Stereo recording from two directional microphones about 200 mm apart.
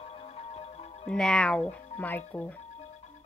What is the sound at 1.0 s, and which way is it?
Music, 5° left (ahead or behind).